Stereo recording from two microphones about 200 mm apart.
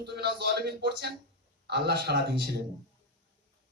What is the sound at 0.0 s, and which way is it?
A woman's voice, 55° right (ahead or behind).